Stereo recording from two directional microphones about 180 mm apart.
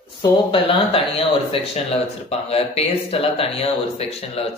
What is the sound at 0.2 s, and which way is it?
Speech, 30° left (ahead or behind).